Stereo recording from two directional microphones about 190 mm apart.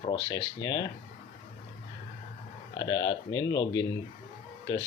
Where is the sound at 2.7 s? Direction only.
20° left (ahead or behind).